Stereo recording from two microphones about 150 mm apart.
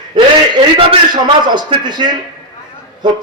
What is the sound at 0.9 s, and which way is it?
A man's voice, 30° right (ahead or behind).